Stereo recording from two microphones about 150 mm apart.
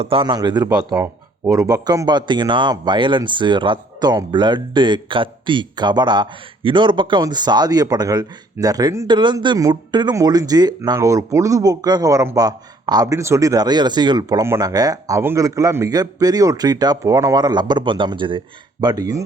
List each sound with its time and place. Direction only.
0.0 s a man's voice: 35° right (ahead or behind)